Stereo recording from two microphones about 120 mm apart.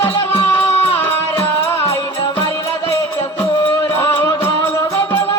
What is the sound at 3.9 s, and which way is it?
Music, 20° left (ahead or behind).